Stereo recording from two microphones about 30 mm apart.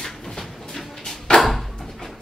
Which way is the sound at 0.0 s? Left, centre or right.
Centre.